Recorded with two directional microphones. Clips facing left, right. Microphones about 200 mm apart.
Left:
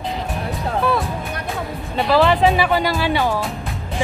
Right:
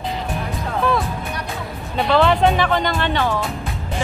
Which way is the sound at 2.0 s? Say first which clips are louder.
Left 1 dB; centre (ahead or behind).